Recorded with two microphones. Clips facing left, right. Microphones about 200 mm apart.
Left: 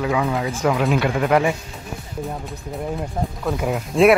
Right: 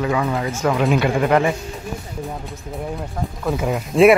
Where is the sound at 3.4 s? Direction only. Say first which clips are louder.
Right 3 dB; centre (ahead or behind).